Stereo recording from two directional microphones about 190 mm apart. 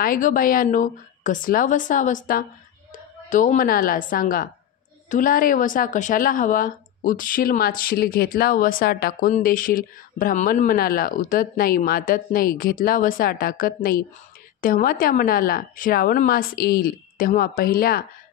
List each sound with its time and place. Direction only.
0.0 s a woman's voice: 45° left (ahead or behind)